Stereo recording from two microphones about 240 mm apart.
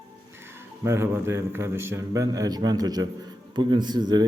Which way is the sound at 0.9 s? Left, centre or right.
Centre.